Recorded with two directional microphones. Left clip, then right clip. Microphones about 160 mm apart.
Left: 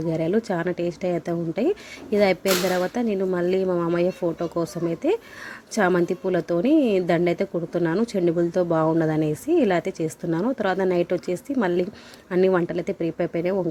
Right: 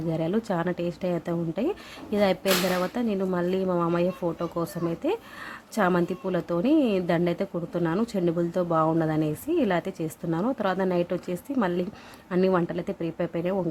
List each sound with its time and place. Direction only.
0.1 s a woman's voice: 15° left (ahead or behind)